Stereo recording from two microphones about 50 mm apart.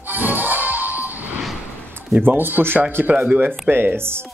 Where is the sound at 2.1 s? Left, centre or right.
Right.